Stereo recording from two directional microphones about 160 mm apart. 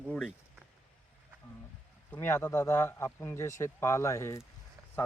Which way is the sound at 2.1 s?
15° left (ahead or behind).